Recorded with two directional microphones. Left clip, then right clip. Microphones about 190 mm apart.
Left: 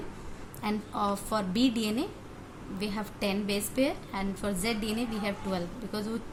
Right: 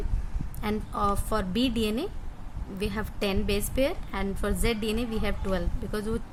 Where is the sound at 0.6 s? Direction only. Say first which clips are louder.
Right 3 dB; 20° right (ahead or behind).